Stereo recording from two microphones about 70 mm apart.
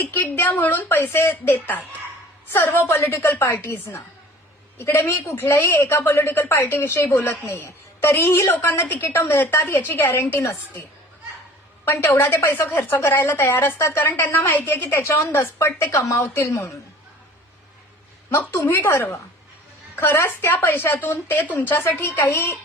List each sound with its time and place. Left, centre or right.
0.0 s a woman's voice: left
4.8 s a woman's voice: left
10.4 s a woman's voice: left
11.9 s a woman's voice: left
14.9 s a woman's voice: left
18.3 s a woman's voice: left